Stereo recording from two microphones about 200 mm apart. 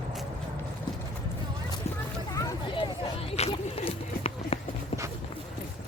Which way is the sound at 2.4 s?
25° left (ahead or behind).